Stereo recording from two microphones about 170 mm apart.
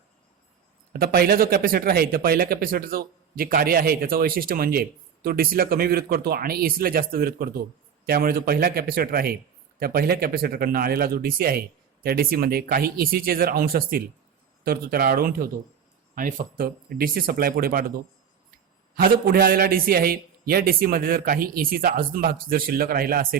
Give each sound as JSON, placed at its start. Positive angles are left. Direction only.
{"t": 0.9, "sound": "speech", "side_deg": -65}